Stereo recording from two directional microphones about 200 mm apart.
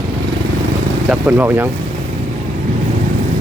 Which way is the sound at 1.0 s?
10° right (ahead or behind).